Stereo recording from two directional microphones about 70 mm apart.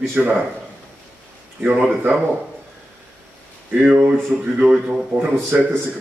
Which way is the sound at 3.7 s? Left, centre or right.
Centre.